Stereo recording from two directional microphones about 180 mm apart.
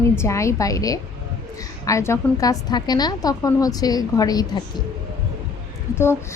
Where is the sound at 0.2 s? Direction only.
15° left (ahead or behind).